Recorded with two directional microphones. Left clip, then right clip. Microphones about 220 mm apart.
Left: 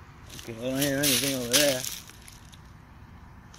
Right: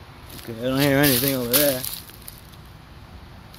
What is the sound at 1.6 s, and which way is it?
Speech, centre (ahead or behind).